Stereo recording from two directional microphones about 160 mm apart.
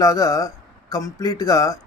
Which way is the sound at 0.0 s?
20° left (ahead or behind).